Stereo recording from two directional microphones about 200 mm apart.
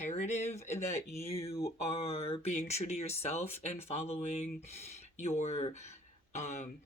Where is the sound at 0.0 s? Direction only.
35° left (ahead or behind).